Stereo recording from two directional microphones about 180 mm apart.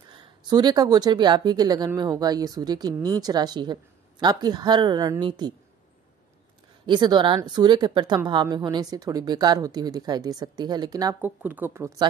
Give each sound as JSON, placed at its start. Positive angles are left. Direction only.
{"t": 0.5, "sound": "speech", "side_deg": -25}
{"t": 6.9, "sound": "speech", "side_deg": -25}
{"t": 11.1, "sound": "speech", "side_deg": -10}